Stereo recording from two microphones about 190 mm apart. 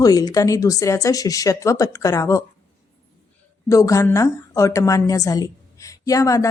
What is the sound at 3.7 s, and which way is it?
A woman's voice, 15° left (ahead or behind).